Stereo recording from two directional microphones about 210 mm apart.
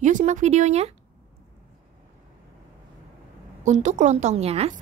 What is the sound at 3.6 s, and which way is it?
A woman's voice, 35° right (ahead or behind).